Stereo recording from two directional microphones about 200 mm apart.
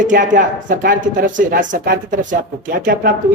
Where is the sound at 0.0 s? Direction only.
40° right (ahead or behind).